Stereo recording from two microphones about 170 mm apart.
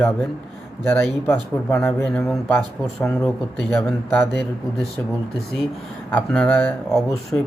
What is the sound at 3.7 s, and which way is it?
Speech, 10° left (ahead or behind).